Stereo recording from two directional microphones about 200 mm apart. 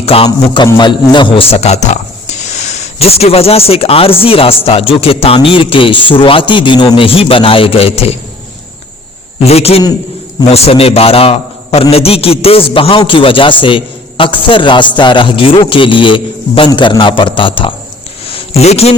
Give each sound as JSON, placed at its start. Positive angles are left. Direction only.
{"t": 0.0, "sound": "music", "side_deg": 30}
{"t": 9.4, "sound": "a man's voice", "side_deg": 30}
{"t": 10.5, "sound": "music", "side_deg": 30}
{"t": 18.3, "sound": "a sound", "side_deg": 30}